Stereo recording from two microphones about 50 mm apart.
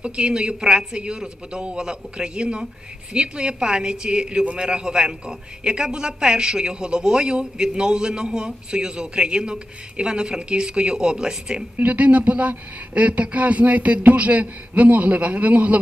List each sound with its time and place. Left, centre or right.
0.0 s a man's voice: centre
11.8 s a man's voice: right